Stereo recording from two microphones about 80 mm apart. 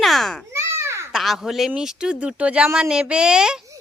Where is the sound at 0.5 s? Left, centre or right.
Right.